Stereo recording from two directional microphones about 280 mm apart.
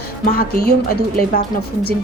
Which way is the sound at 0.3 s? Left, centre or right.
Left.